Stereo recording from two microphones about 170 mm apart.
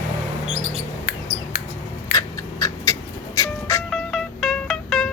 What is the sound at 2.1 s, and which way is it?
Music, 20° left (ahead or behind).